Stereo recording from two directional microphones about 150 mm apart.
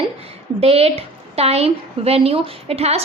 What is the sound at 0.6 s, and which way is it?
A woman's voice, 40° right (ahead or behind).